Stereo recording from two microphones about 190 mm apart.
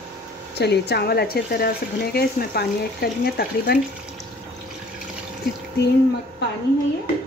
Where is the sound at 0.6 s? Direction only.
60° left (ahead or behind).